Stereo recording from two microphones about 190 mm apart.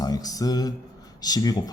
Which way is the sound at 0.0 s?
20° left (ahead or behind).